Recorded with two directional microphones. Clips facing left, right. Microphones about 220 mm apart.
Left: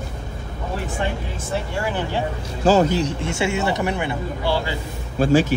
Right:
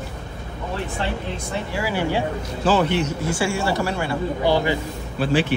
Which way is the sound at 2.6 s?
40° left (ahead or behind).